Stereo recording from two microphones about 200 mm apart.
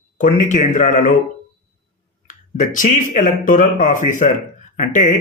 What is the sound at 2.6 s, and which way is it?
Speech, 40° left (ahead or behind).